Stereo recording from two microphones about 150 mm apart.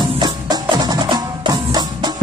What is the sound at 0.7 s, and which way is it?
Percussion, 25° right (ahead or behind).